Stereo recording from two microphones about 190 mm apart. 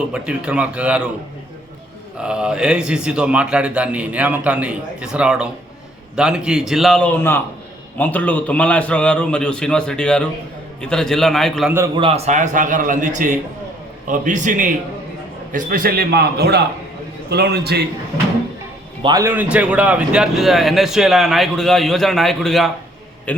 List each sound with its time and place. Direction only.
0.1 s a man's voice: 5° right (ahead or behind)
2.1 s a man's voice: 5° right (ahead or behind)
11.9 s a man's voice: 30° right (ahead or behind); by 17.8 s 60° right (ahead or behind)
19.0 s a man's voice: 15° right (ahead or behind); by 23.4 s 5° left (ahead or behind)